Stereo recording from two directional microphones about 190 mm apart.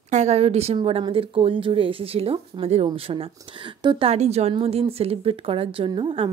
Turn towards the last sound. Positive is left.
turn(degrees=-25)  # may be behind; listen again after turning